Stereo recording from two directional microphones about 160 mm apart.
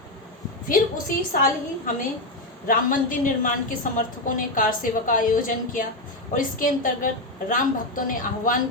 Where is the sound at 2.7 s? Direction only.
55° left (ahead or behind).